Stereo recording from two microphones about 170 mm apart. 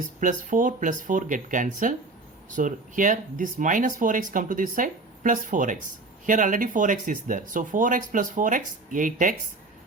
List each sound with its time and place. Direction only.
0.2 s speech: 50° right (ahead or behind)